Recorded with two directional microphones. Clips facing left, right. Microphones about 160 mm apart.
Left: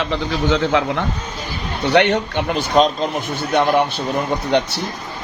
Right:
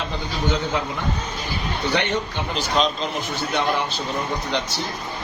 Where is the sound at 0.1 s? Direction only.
90° left.